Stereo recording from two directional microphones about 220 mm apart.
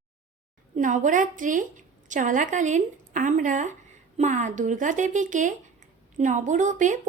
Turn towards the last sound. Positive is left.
turn(degrees=-35)  # may be behind; listen again after turning